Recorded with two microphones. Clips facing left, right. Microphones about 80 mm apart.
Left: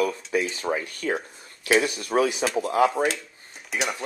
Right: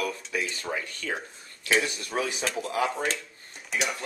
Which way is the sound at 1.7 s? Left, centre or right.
Centre.